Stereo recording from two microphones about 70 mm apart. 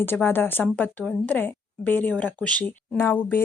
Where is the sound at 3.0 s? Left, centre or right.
Left.